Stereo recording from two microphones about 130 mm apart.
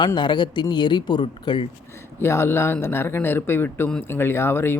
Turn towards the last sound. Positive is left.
turn(degrees=15)  # may be behind; listen again after turning